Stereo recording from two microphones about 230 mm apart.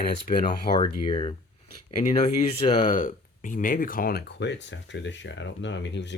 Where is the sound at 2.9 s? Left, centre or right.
Left.